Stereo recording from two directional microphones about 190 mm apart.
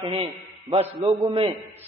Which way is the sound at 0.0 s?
30° right (ahead or behind).